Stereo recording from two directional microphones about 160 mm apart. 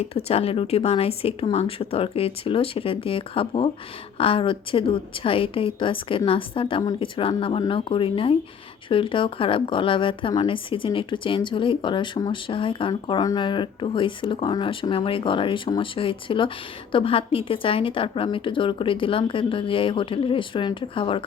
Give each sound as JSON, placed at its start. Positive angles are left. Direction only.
{"t": 0.0, "sound": "speech", "side_deg": 40}